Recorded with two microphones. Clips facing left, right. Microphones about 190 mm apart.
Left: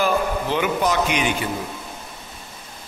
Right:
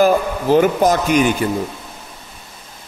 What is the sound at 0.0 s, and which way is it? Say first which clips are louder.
A man's voice: right 6 dB; 45° right (ahead or behind).